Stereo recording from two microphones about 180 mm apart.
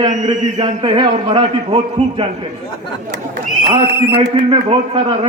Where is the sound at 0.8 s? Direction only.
25° right (ahead or behind).